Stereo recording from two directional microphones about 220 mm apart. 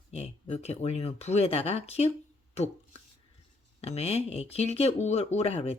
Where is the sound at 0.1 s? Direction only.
30° left (ahead or behind).